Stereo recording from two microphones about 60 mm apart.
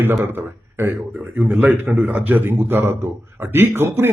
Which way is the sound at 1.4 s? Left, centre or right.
Right.